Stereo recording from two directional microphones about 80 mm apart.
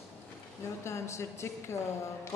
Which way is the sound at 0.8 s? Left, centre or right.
Left.